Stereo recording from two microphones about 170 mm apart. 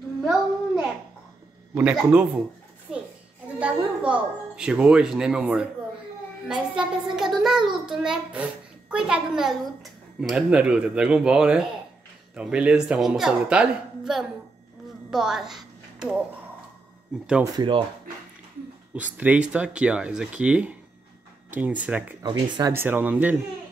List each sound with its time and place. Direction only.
1.8 s speech: 5° right (ahead or behind)
3.5 s a woman's voice: 5° right (ahead or behind)
15.0 s a sound: 5° right (ahead or behind)
17.5 s speech: 25° right (ahead or behind)
18.9 s speech: 10° right (ahead or behind)
22.2 s speech: 25° right (ahead or behind)
22.7 s speech: 10° right (ahead or behind)